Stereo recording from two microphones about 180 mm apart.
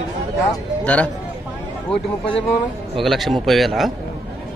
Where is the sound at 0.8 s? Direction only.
5° left (ahead or behind).